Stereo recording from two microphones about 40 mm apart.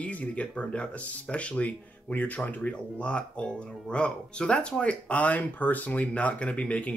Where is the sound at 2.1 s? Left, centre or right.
Left.